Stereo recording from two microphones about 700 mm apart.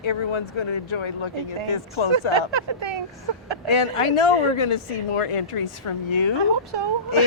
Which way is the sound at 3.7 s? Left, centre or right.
Left.